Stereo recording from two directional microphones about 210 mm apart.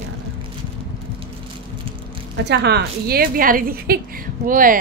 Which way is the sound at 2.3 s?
55° right (ahead or behind).